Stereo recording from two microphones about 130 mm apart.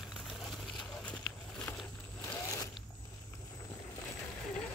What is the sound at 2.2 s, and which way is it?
Zipper, 20° left (ahead or behind).